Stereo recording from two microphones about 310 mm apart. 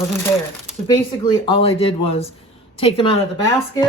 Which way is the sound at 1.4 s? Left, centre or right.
Centre.